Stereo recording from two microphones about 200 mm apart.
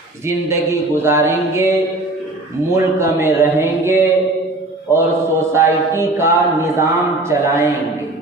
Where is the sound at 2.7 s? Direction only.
15° right (ahead or behind).